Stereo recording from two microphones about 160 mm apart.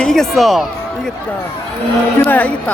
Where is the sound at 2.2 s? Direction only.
10° left (ahead or behind).